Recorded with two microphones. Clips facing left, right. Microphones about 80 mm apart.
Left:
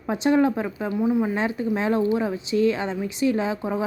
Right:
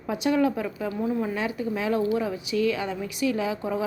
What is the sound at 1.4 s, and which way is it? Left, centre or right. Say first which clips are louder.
Speech: left 4 dB; left.